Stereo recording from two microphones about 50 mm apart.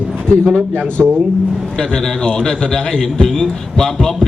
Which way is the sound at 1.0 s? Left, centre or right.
Centre.